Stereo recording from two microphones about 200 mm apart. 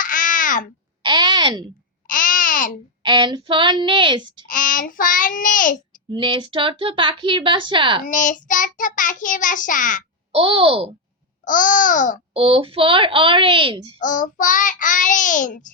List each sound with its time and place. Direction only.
0.0 s babbling: 40° left (ahead or behind)
1.0 s a sound: 20° right (ahead or behind)
2.0 s babbling: 40° left (ahead or behind)
3.0 s speech: 25° right (ahead or behind)
4.4 s child singing: 45° left (ahead or behind)
6.1 s speech: 25° right (ahead or behind)
8.0 s child singing: 40° left (ahead or behind)
10.3 s speech: 25° right (ahead or behind)
11.4 s child singing: 40° left (ahead or behind)
12.3 s speech: 30° right (ahead or behind)
14.0 s child singing: 40° left (ahead or behind)